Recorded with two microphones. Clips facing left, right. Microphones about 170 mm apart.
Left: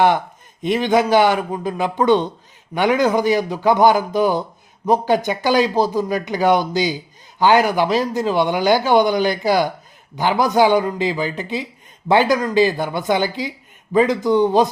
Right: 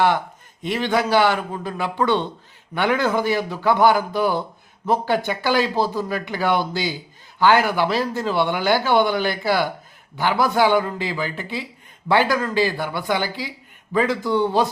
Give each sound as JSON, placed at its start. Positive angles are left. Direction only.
{"t": 0.6, "sound": "speech", "side_deg": 20}